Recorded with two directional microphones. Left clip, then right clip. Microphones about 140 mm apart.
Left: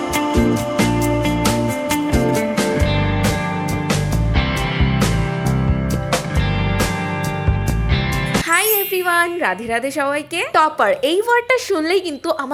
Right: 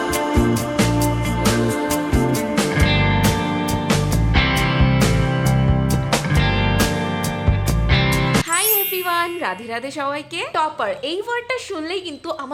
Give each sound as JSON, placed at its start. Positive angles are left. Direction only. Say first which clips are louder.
{"t": 0.3, "sound": "music", "louder": "left 2 dB", "side_deg": 0}
{"t": 9.0, "sound": "wind chime", "louder": "left 4 dB", "side_deg": 25}
{"t": 10.5, "sound": "a woman's voice", "louder": "left 7 dB", "side_deg": 30}